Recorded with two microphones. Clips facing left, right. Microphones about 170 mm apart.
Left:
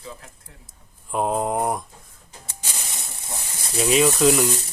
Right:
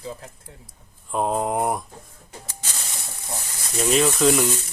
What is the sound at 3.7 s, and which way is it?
Speech, 5° left (ahead or behind).